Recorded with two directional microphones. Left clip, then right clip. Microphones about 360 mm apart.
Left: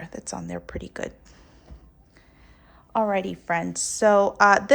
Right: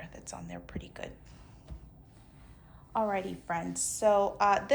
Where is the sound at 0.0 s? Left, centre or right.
Centre.